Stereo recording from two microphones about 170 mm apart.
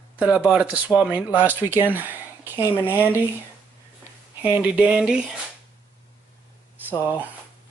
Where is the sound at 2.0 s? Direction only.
10° right (ahead or behind).